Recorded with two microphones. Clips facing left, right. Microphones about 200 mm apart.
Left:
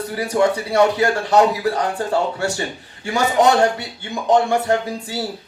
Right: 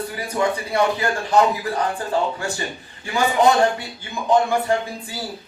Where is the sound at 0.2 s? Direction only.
75° left (ahead or behind).